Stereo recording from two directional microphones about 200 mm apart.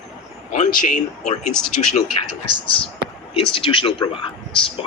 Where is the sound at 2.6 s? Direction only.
25° left (ahead or behind).